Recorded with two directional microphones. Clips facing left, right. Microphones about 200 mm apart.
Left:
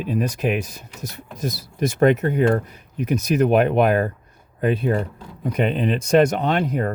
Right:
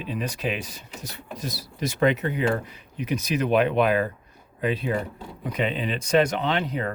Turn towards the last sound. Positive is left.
turn(degrees=45)  # may be behind; listen again after turning